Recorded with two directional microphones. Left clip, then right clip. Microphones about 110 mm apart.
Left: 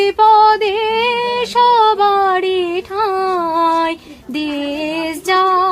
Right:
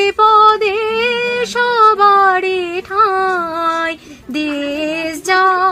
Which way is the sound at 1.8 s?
15° left (ahead or behind).